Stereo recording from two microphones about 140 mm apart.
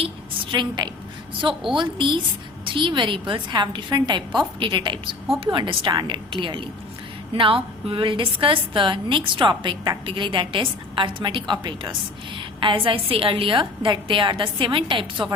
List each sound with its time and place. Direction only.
0.5 s a woman's voice: 35° right (ahead or behind)